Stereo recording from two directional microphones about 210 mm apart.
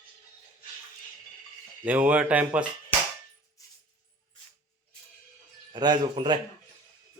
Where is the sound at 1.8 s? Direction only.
5° right (ahead or behind).